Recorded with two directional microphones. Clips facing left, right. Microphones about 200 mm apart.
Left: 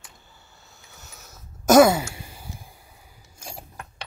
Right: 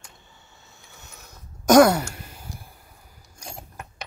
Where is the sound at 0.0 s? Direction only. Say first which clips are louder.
Right 1 dB; centre (ahead or behind).